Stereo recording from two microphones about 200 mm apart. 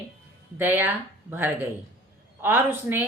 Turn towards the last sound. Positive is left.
turn(degrees=-10)  # may be behind; listen again after turning